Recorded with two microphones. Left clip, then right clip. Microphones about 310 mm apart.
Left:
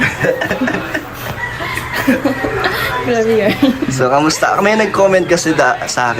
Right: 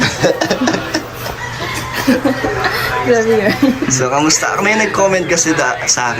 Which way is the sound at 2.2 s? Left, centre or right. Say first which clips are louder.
Even; centre.